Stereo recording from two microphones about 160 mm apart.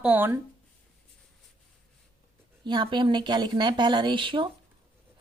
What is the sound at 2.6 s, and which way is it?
A woman's voice, 30° right (ahead or behind).